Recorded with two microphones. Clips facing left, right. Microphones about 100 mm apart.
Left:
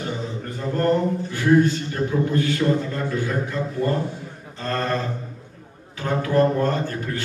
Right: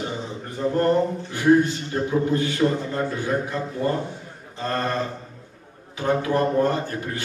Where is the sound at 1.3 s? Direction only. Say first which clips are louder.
Even; 20° right (ahead or behind).